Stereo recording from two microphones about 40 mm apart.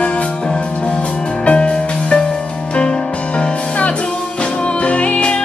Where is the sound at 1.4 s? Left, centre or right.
Left.